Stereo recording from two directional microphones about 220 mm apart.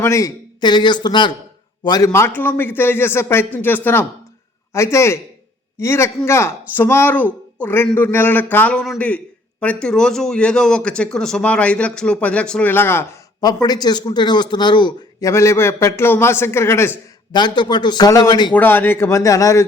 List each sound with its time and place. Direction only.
0.0 s a man's voice: 15° left (ahead or behind)